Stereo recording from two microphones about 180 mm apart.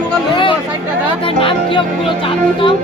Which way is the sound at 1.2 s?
30° left (ahead or behind).